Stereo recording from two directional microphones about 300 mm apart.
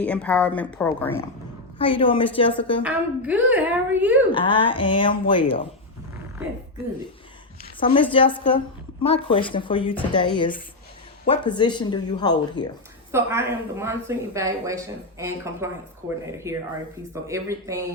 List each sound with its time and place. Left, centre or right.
0.0 s a woman's voice: centre
1.8 s a woman's voice: centre
2.8 s a woman's voice: centre
4.3 s a woman's voice: centre
7.8 s a woman's voice: centre
11.3 s a woman's voice: centre
13.1 s speech: centre